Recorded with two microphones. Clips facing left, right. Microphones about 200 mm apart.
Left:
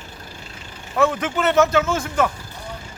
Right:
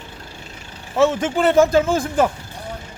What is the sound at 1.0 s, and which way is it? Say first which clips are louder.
Speech: right 3 dB; 25° right (ahead or behind).